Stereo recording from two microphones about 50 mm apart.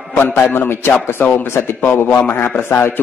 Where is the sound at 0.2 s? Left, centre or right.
Left.